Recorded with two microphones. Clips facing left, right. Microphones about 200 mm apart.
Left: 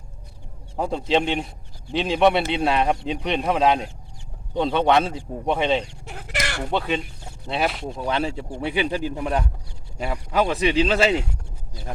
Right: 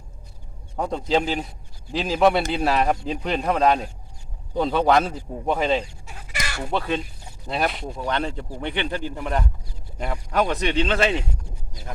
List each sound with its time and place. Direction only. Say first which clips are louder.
0.8 s speech: left 1 dB; centre (ahead or behind)
5.9 s chicken: left 6 dB; 65° left (ahead or behind)
6.7 s speech: right 1 dB; centre (ahead or behind)